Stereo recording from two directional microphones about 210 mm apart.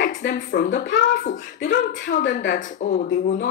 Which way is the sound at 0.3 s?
40° left (ahead or behind).